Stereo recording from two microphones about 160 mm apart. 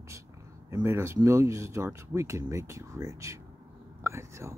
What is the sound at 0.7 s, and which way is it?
Speech, 15° right (ahead or behind).